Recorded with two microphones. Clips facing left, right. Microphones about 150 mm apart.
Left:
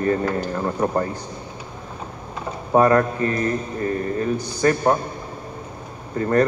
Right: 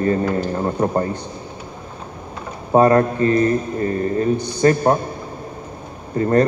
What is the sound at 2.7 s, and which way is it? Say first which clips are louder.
Speech: right 3 dB; 30° right (ahead or behind).